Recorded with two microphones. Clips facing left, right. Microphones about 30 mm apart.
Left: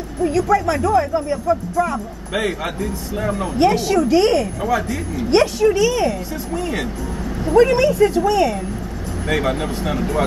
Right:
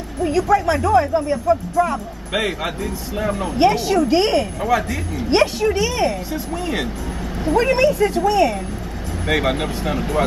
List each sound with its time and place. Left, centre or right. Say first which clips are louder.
0.2 s speech: even; centre
9.3 s speech: right 1 dB; centre